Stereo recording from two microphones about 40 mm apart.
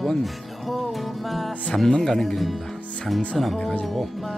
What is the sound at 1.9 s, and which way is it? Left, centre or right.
Speech, centre.